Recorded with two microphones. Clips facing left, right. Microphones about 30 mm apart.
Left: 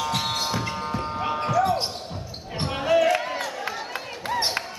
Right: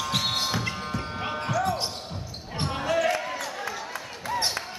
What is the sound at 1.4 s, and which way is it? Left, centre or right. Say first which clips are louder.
Basketball bounce: left 4 dB; centre.